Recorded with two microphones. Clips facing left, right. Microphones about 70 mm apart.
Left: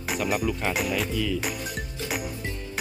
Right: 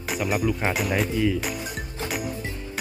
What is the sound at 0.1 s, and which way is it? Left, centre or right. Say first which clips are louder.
Speech: right 2 dB; centre.